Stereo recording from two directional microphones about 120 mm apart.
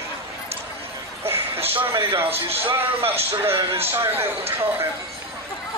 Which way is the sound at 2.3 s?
55° right (ahead or behind).